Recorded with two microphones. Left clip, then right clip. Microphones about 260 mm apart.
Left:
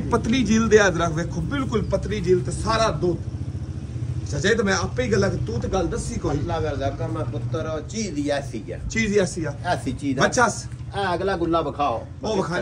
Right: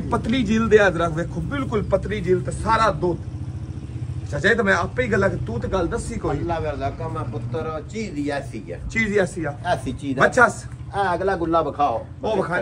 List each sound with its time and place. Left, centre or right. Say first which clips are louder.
0.1 s speech: left 1 dB; centre
4.3 s speech: right 3 dB; centre
7.5 s a man's voice: even; right
8.9 s speech: right 1 dB; centre